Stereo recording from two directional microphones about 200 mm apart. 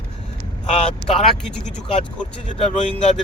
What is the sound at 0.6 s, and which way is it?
Vehicle, 30° left (ahead or behind).